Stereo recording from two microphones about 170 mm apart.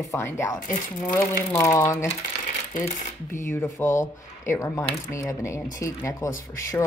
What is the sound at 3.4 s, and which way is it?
Speech, 15° left (ahead or behind).